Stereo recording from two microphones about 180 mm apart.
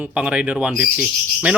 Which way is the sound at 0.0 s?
5° right (ahead or behind).